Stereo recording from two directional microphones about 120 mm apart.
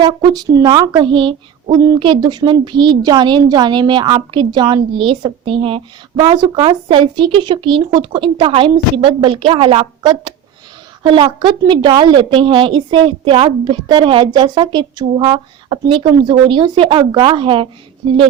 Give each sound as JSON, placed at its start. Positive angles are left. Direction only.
{"t": 0.0, "sound": "speech", "side_deg": -35}
{"t": 1.7, "sound": "speech", "side_deg": -30}
{"t": 2.0, "sound": "a woman's voice", "side_deg": -40}